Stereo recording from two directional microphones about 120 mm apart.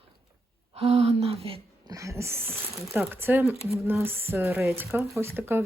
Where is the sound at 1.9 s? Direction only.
25° right (ahead or behind).